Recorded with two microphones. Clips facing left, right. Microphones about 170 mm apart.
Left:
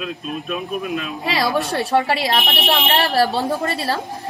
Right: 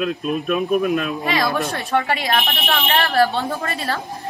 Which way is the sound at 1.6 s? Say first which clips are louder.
Left 2 dB; 35° left (ahead or behind).